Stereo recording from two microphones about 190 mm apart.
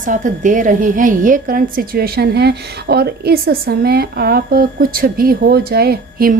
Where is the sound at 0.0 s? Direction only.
40° right (ahead or behind).